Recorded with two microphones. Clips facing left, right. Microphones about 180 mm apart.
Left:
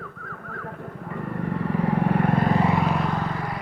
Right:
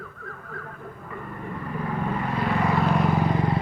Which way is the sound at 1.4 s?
80° left.